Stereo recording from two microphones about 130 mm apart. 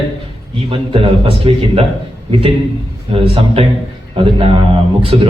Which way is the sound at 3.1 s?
45° right (ahead or behind).